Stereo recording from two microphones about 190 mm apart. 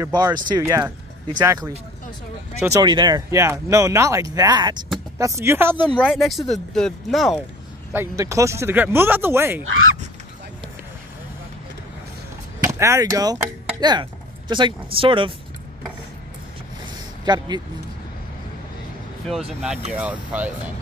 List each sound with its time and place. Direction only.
0.0 s speech: 20° right (ahead or behind)
5.9 s speech: 5° left (ahead or behind)
7.9 s speech: 15° right (ahead or behind)
12.6 s speech: 15° right (ahead or behind)
17.2 s speech: 20° right (ahead or behind)
19.9 s speech: 5° right (ahead or behind)